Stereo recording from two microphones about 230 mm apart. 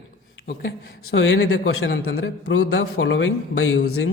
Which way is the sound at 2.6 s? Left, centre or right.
Left.